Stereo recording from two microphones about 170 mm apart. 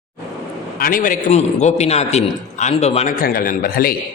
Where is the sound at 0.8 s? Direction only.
55° left (ahead or behind); by 3.2 s 40° left (ahead or behind).